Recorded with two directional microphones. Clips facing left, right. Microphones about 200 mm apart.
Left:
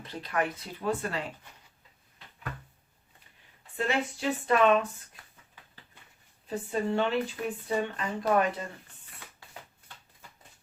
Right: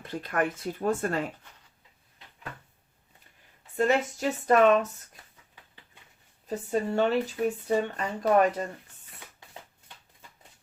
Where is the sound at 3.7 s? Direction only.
45° right (ahead or behind).